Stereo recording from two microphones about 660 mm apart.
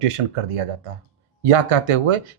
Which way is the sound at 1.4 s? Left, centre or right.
Right.